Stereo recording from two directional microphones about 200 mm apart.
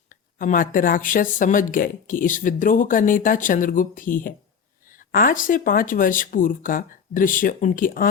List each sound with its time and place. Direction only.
0.1 s speech: 40° left (ahead or behind)